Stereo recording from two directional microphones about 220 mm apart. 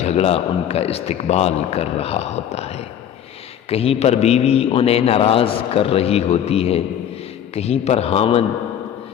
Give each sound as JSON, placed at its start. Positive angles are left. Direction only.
{"t": 0.0, "sound": "a man's voice", "side_deg": 30}